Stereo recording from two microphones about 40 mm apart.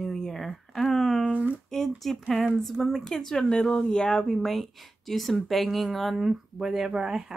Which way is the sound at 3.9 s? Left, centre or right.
Centre.